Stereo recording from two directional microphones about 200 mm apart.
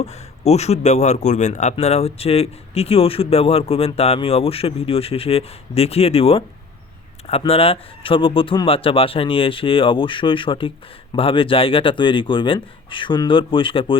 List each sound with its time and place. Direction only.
0.0 s a man's voice: 30° left (ahead or behind)